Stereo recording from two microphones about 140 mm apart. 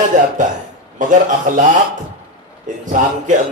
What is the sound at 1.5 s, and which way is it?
Speech, 70° right (ahead or behind).